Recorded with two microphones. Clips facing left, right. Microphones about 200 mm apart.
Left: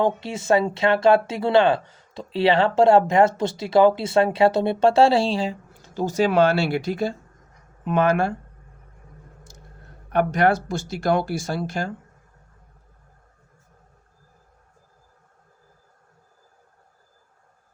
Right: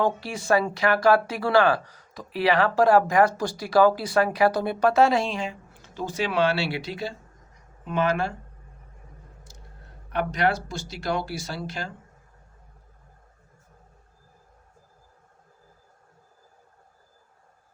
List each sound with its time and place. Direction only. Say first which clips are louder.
0.0 s speech: left 3 dB; 25° left (ahead or behind); by 8.3 s 50° left (ahead or behind)
10.1 s speech: left 5 dB; 50° left (ahead or behind)